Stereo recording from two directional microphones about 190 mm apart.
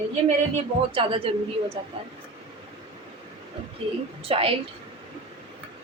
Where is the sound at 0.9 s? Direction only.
30° right (ahead or behind).